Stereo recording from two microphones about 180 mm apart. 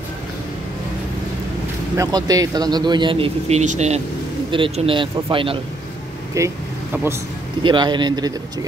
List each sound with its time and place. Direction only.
2.0 s speech: 20° right (ahead or behind)
6.3 s speech: 15° right (ahead or behind)
7.6 s speech: 25° right (ahead or behind)